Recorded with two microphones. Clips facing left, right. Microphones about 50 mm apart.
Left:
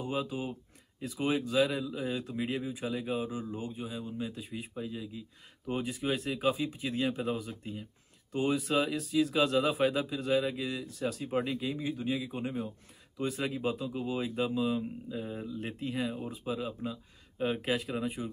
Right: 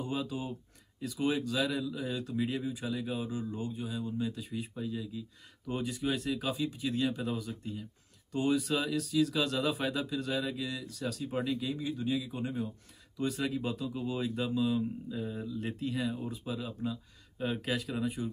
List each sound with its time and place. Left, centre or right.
0.0 s speech: centre